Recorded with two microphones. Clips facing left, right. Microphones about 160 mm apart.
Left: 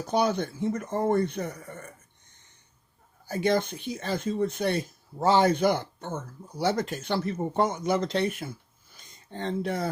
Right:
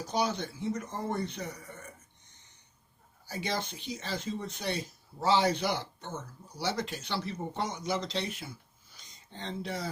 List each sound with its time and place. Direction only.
0.0 s speech: 55° left (ahead or behind)
3.2 s speech: 50° left (ahead or behind)